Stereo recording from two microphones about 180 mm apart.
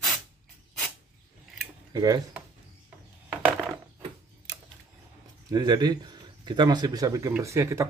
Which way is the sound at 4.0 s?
25° right (ahead or behind).